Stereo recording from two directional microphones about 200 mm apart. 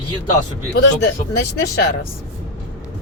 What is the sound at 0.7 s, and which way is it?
Speech, 55° left (ahead or behind).